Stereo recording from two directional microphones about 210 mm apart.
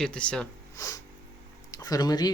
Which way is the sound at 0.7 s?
15° left (ahead or behind).